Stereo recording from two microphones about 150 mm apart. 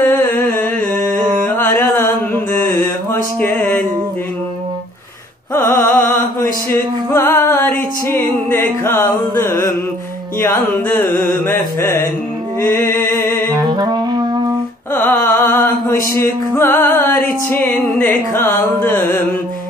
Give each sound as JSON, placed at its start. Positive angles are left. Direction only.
{"t": 0.0, "sound": "humming", "side_deg": 15}
{"t": 1.4, "sound": "music", "side_deg": 15}
{"t": 3.3, "sound": "music", "side_deg": 10}
{"t": 5.5, "sound": "music", "side_deg": 15}
{"t": 9.4, "sound": "music", "side_deg": 20}
{"t": 13.5, "sound": "music", "side_deg": -30}
{"t": 15.0, "sound": "music", "side_deg": 15}